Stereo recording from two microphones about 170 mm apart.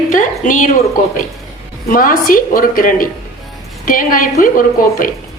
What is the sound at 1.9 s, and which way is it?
A woman's voice, 55° left (ahead or behind).